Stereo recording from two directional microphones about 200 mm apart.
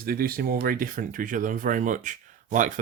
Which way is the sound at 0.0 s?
45° right (ahead or behind).